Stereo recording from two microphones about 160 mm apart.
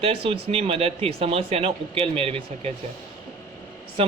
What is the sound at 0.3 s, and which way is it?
Speech, 35° right (ahead or behind).